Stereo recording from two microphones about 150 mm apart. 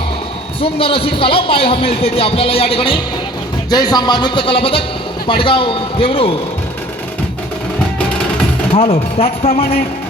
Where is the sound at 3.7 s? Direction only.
25° left (ahead or behind).